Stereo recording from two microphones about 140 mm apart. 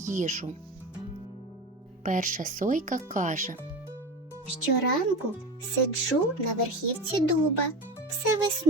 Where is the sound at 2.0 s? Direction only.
70° right (ahead or behind).